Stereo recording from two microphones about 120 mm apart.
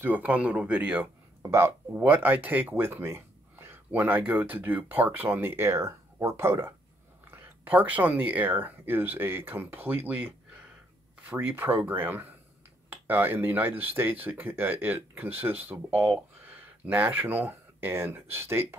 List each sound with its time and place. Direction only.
0.0 s speech: 15° right (ahead or behind)